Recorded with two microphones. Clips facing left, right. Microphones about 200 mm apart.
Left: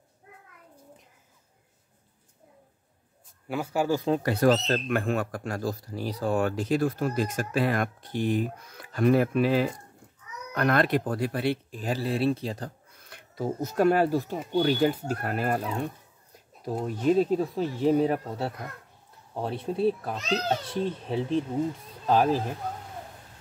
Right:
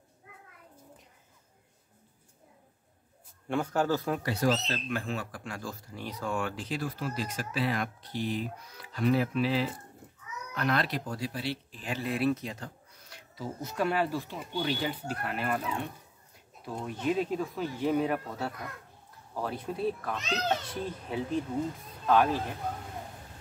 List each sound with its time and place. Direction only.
3.4 s speech: 5° left (ahead or behind)
4.2 s speech: 55° left (ahead or behind)
11.8 s speech: 35° left (ahead or behind)
13.1 s speech: 45° left (ahead or behind)